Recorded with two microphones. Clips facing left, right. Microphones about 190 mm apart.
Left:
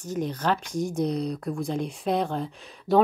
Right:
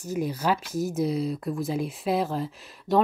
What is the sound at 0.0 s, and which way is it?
Speech, 10° right (ahead or behind).